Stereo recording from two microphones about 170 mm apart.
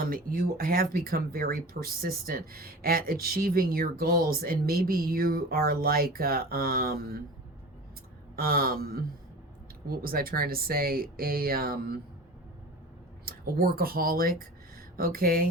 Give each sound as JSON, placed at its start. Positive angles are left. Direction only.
{"t": 0.0, "sound": "speech", "side_deg": -60}
{"t": 8.4, "sound": "speech", "side_deg": -60}
{"t": 13.2, "sound": "speech", "side_deg": -60}